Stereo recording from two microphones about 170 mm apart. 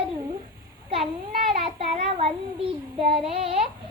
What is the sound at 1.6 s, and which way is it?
Speech, 35° right (ahead or behind).